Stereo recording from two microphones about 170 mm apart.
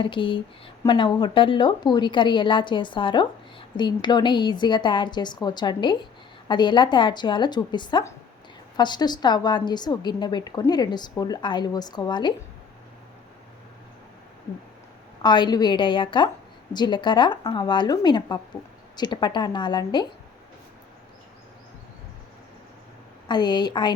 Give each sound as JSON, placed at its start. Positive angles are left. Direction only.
{"t": 0.0, "sound": "a woman's voice", "side_deg": 30}
{"t": 15.2, "sound": "a woman's voice", "side_deg": 25}
{"t": 23.3, "sound": "a woman's voice", "side_deg": 25}